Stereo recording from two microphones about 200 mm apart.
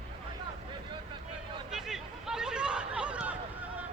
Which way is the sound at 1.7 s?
Centre (ahead or behind).